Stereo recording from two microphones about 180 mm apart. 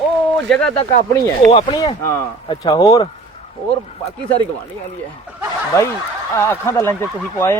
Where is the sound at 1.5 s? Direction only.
25° left (ahead or behind).